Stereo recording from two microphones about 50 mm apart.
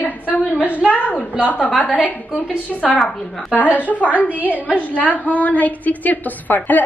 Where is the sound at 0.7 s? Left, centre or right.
Right.